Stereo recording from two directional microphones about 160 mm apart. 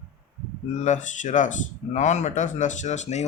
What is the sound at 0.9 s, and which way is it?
Speech, 50° left (ahead or behind).